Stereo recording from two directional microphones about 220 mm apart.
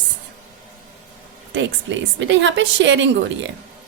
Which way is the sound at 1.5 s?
55° right (ahead or behind).